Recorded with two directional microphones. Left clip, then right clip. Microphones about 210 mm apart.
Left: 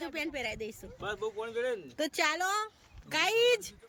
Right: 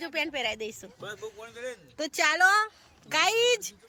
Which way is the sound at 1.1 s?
60° left (ahead or behind).